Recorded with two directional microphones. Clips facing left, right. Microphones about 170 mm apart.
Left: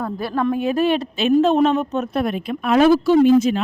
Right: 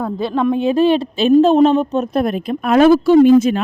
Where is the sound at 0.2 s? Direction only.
20° right (ahead or behind).